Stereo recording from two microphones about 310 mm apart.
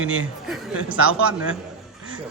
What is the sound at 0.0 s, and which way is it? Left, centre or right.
Speech, right.